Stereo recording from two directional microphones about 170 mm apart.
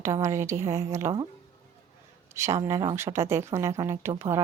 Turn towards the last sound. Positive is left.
turn(degrees=-15)  # may be behind; listen again after turning